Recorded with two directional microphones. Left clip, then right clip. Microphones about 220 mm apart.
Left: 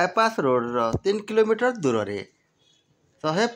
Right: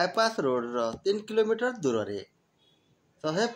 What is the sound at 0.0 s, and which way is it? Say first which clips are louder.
Speech: left 5 dB; 20° left (ahead or behind).